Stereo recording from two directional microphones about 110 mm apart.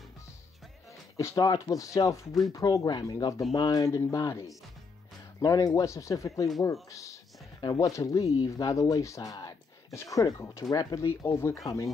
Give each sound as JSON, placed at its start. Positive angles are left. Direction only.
{"t": 1.1, "sound": "speech", "side_deg": 30}